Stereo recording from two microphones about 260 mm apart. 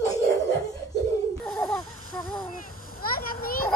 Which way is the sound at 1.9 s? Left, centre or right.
Left.